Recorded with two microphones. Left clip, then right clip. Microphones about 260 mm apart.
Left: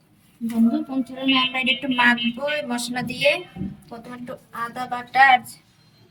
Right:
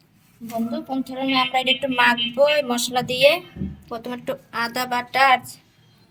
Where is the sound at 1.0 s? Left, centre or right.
Right.